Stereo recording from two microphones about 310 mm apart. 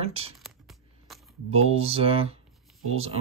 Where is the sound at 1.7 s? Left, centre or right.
Centre.